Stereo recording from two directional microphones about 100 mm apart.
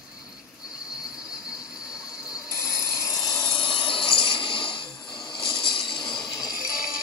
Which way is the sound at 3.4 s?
55° left (ahead or behind).